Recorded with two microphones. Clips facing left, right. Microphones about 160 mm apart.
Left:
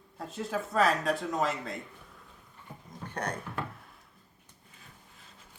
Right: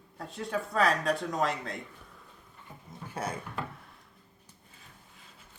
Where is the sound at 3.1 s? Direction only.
5° right (ahead or behind).